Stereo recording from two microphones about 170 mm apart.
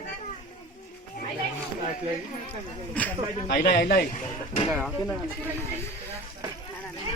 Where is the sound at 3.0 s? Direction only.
10° left (ahead or behind).